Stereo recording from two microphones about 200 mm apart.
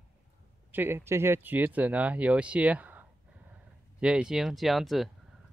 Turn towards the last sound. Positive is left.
turn(degrees=0)  # may be behind; listen again after turning